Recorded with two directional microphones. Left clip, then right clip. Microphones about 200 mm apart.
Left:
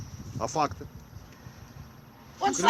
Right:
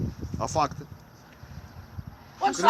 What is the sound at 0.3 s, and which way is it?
Speech, 55° right (ahead or behind).